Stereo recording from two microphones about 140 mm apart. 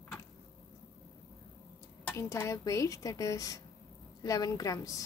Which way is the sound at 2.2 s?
20° left (ahead or behind).